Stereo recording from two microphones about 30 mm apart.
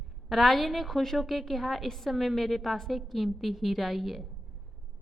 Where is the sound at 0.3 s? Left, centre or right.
Centre.